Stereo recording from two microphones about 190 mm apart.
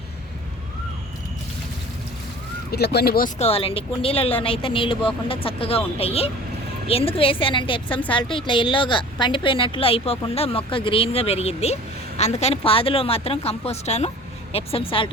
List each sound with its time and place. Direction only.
2.7 s a woman's voice: 60° left (ahead or behind); by 7.8 s 25° left (ahead or behind)
7.9 s a woman's voice: 10° left (ahead or behind)
8.1 s a woman's voice: 25° left (ahead or behind)